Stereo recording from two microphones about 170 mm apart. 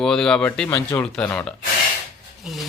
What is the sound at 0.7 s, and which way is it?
Speech, 15° left (ahead or behind).